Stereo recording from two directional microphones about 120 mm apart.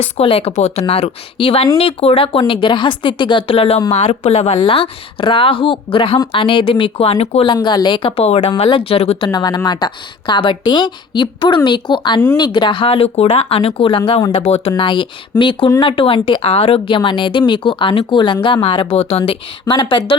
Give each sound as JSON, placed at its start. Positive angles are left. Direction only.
{"t": 0.0, "sound": "speech", "side_deg": 55}
{"t": 0.5, "sound": "speech", "side_deg": 65}
{"t": 3.9, "sound": "speech", "side_deg": 60}
{"t": 7.5, "sound": "a woman's voice", "side_deg": 40}
{"t": 8.4, "sound": "speech", "side_deg": 65}
{"t": 8.7, "sound": "speech", "side_deg": 50}
{"t": 9.2, "sound": "a woman's voice", "side_deg": 35}